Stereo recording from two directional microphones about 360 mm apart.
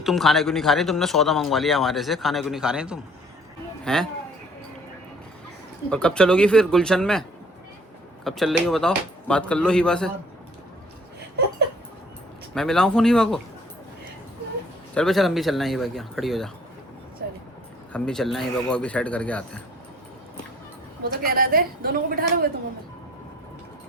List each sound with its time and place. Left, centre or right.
0.0 s a man's voice: centre
5.9 s a man's voice: centre
12.5 s a man's voice: centre
14.9 s a man's voice: centre
17.2 s vehicle: right
17.9 s a man's voice: centre
21.2 s a woman's voice: right